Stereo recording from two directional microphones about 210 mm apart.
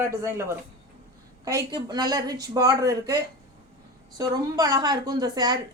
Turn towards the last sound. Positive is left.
turn(degrees=-20)  # may be behind; listen again after turning